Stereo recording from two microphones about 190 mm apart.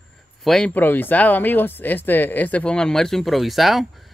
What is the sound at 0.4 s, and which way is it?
Speech, 5° left (ahead or behind).